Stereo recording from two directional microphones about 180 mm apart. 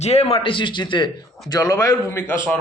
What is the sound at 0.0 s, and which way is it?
A man's voice, 35° left (ahead or behind).